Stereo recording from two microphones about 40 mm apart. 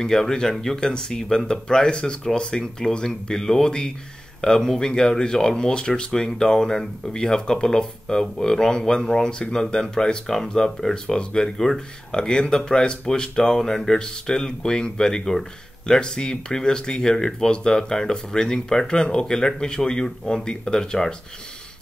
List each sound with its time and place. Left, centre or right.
0.0 s speech: centre